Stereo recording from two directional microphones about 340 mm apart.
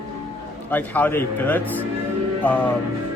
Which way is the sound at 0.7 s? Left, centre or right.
Centre.